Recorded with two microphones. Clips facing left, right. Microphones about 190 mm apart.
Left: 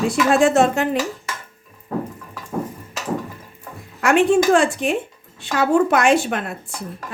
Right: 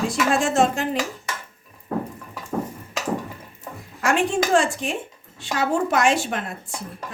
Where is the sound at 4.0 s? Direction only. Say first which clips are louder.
Left 6 dB; 65° left (ahead or behind).